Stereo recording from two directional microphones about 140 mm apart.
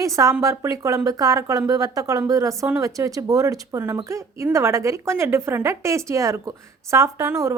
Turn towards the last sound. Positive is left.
turn(degrees=-20)  # may be behind; listen again after turning